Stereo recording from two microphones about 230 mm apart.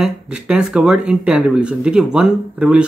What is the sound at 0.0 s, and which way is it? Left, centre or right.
Speech, centre.